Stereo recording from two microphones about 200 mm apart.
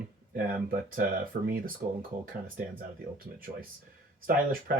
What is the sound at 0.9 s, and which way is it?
Speech, 45° right (ahead or behind).